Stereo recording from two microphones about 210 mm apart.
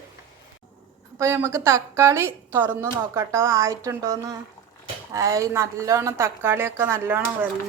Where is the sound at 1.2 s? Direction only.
15° right (ahead or behind).